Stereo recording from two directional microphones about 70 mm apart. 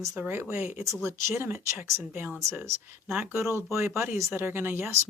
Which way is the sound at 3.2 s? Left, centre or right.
Right.